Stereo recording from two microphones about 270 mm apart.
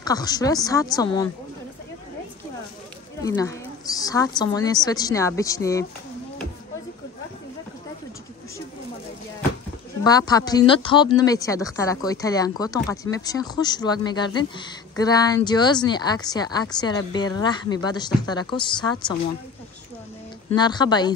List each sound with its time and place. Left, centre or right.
0.0 s a woman's voice: centre
3.2 s a woman's voice: centre
10.0 s a woman's voice: centre
20.4 s a woman's voice: centre